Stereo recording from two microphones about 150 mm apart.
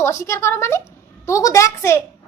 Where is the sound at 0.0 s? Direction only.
20° left (ahead or behind).